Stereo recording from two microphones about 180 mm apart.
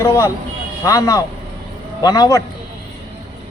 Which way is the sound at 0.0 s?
15° left (ahead or behind).